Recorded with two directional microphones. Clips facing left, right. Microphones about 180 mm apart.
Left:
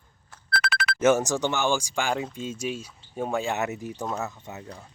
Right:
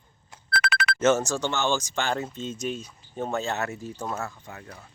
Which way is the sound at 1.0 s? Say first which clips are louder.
Left 1 dB; 15° left (ahead or behind).